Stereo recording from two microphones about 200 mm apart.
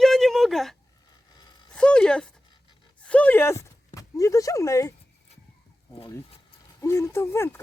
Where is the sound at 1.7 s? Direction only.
5° left (ahead or behind).